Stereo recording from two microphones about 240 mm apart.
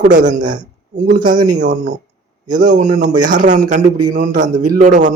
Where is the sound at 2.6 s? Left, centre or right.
Right.